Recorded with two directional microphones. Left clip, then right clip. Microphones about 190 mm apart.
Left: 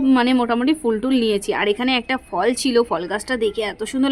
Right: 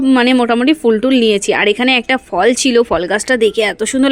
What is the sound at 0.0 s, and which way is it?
A woman's voice, 10° right (ahead or behind).